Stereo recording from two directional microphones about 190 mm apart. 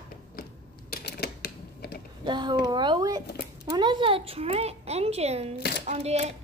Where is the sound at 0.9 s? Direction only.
55° left (ahead or behind).